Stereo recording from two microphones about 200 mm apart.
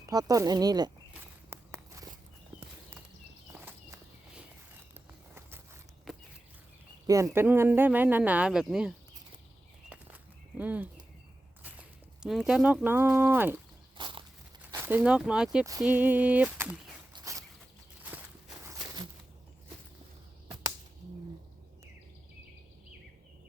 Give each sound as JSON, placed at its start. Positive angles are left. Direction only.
{"t": 0.0, "sound": "speech", "side_deg": -20}
{"t": 1.1, "sound": "walk", "side_deg": -10}
{"t": 3.5, "sound": "walk", "side_deg": -10}
{"t": 6.1, "sound": "a sound", "side_deg": 0}
{"t": 7.1, "sound": "speech", "side_deg": -15}
{"t": 10.6, "sound": "speech", "side_deg": -10}
{"t": 13.9, "sound": "walk", "side_deg": -25}
{"t": 14.7, "sound": "speech", "side_deg": -10}
{"t": 17.3, "sound": "a sound", "side_deg": -15}
{"t": 18.6, "sound": "a sound", "side_deg": -15}